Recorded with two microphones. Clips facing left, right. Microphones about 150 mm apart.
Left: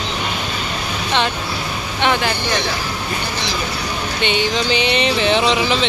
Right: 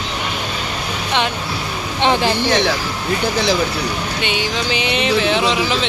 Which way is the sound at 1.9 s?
30° right (ahead or behind).